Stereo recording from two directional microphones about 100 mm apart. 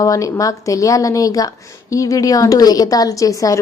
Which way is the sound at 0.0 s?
35° left (ahead or behind).